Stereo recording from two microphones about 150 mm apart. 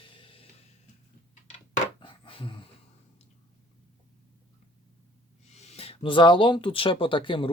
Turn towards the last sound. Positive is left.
turn(degrees=35)  # may be behind; listen again after turning